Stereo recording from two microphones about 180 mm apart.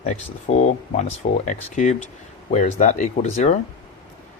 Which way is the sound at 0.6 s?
40° left (ahead or behind).